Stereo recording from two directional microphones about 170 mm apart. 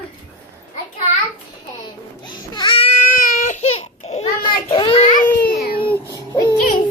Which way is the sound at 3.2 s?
50° left (ahead or behind).